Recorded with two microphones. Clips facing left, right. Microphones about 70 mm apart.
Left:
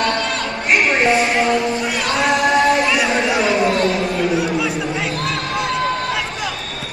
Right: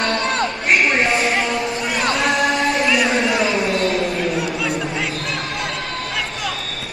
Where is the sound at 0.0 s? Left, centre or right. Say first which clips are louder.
Even; right.